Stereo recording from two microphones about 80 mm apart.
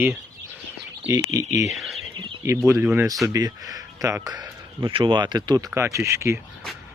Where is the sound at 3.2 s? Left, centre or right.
Right.